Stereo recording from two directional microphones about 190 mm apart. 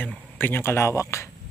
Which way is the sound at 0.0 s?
10° left (ahead or behind).